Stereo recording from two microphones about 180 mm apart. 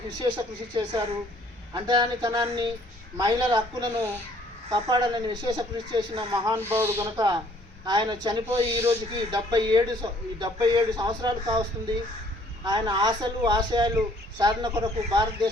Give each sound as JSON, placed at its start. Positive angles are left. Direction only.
{"t": 0.2, "sound": "a man's voice", "side_deg": -25}
{"t": 1.7, "sound": "a man's voice", "side_deg": -25}
{"t": 7.2, "sound": "a man's voice", "side_deg": -20}
{"t": 12.6, "sound": "a man's voice", "side_deg": -20}